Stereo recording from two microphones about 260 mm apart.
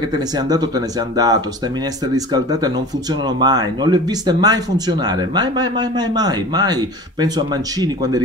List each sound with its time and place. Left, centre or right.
0.4 s speech: centre